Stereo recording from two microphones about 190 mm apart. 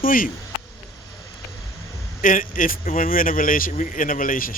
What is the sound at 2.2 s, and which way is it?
Speech, 45° left (ahead or behind).